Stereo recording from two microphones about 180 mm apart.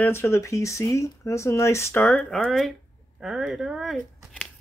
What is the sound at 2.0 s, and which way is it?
Speech, 5° left (ahead or behind).